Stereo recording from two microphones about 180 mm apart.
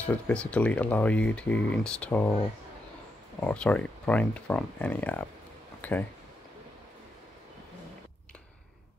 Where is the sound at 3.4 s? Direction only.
5° left (ahead or behind).